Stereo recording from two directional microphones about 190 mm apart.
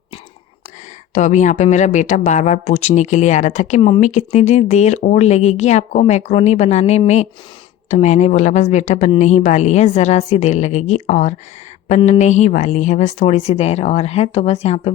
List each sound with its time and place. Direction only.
1.1 s speech: 40° left (ahead or behind)